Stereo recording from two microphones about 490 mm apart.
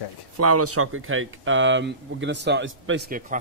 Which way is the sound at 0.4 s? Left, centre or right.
Right.